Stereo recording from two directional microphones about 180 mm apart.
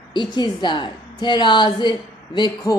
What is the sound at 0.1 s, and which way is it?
A woman's voice, 25° left (ahead or behind).